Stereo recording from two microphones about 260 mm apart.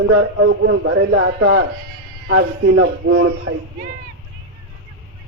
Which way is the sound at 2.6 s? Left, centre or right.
Right.